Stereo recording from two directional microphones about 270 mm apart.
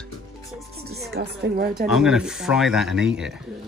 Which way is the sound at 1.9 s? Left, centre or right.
Centre.